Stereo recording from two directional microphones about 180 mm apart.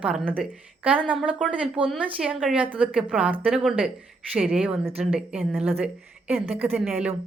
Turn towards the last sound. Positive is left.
turn(degrees=-5)  # may be behind; listen again after turning